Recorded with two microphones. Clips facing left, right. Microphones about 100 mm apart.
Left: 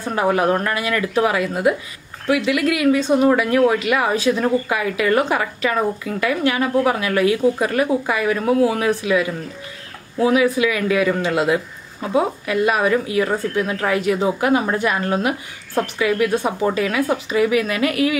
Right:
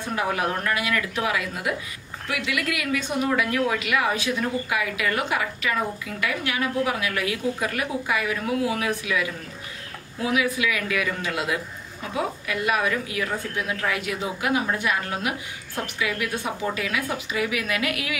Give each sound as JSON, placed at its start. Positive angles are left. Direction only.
{"t": 0.1, "sound": "a woman's voice", "side_deg": 35}